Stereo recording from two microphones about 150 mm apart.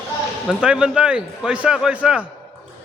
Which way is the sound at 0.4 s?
5° right (ahead or behind).